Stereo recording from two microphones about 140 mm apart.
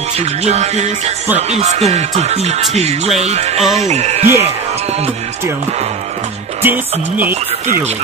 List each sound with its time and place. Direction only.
0.2 s speech: 50° right (ahead or behind)
6.6 s music: 15° right (ahead or behind)